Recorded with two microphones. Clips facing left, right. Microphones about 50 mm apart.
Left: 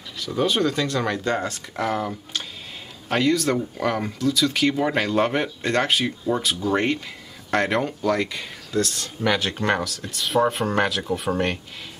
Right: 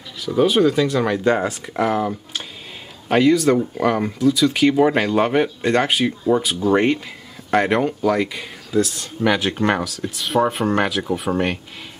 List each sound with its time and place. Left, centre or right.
0.2 s speech: centre